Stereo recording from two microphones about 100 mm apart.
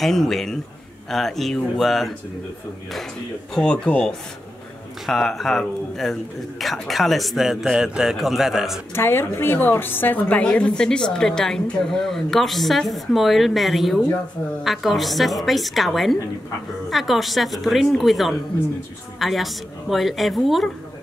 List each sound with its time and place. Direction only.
0.0 s speech: 5° left (ahead or behind)
3.5 s speech: 10° left (ahead or behind)
8.9 s a woman's voice: 25° left (ahead or behind); by 20.7 s centre (ahead or behind)